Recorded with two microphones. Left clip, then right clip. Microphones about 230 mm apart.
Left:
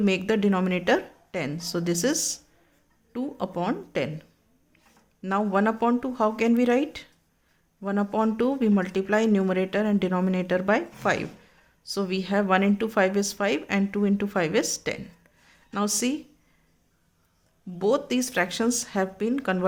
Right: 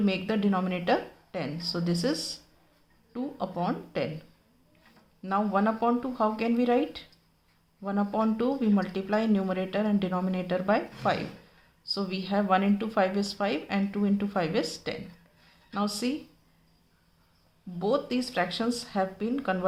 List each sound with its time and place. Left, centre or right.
0.0 s speech: left
5.2 s speech: left
17.7 s speech: left